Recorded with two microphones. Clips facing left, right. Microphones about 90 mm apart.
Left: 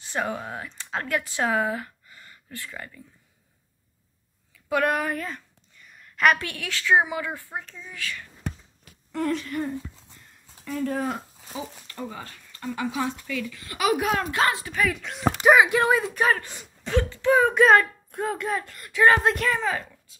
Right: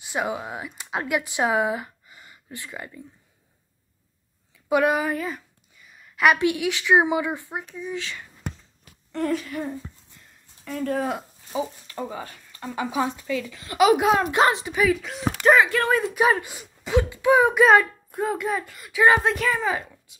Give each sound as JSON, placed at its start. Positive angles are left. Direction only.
{"t": 0.0, "sound": "speech", "side_deg": -10}
{"t": 4.6, "sound": "a sound", "side_deg": -10}
{"t": 6.3, "sound": "speech", "side_deg": -15}
{"t": 9.1, "sound": "speech", "side_deg": 0}
{"t": 11.5, "sound": "speech", "side_deg": -20}
{"t": 14.8, "sound": "speech", "side_deg": 0}
{"t": 15.4, "sound": "speech", "side_deg": 10}
{"t": 15.9, "sound": "speech", "side_deg": 0}
{"t": 16.2, "sound": "speech", "side_deg": -15}
{"t": 19.7, "sound": "speech", "side_deg": -15}